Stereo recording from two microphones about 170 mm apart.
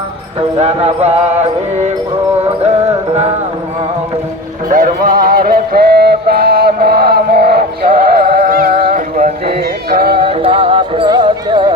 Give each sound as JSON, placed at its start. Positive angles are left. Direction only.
{"t": 0.6, "sound": "music", "side_deg": -40}
{"t": 4.7, "sound": "music", "side_deg": -50}
{"t": 10.2, "sound": "music", "side_deg": -30}